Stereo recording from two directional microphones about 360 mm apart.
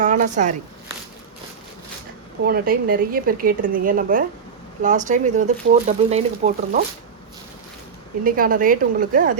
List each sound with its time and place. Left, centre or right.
0.0 s speech: centre
2.4 s speech: right
8.2 s speech: right